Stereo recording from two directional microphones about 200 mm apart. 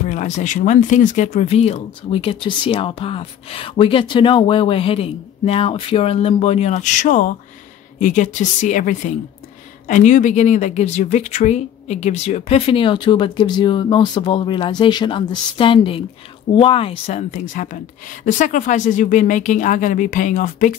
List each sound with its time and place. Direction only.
0.1 s a woman's voice: 35° left (ahead or behind)